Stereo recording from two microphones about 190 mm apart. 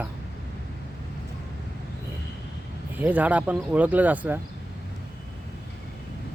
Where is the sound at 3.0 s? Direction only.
10° right (ahead or behind).